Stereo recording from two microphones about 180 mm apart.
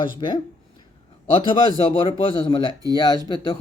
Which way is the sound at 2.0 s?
25° left (ahead or behind).